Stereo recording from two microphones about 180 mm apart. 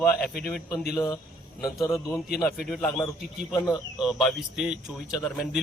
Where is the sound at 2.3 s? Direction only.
Centre (ahead or behind).